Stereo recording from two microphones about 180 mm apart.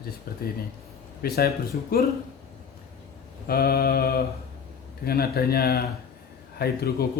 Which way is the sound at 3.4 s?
55° left (ahead or behind).